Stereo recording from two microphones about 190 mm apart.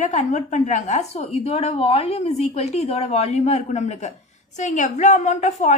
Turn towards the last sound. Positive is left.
turn(degrees=40)  # may be behind; listen again after turning